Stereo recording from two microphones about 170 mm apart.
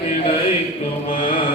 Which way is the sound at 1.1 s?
30° left (ahead or behind).